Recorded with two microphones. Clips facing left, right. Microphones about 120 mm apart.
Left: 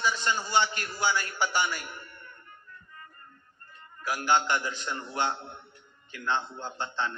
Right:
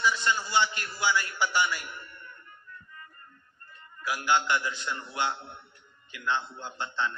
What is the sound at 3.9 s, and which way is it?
A man's voice, 45° left (ahead or behind).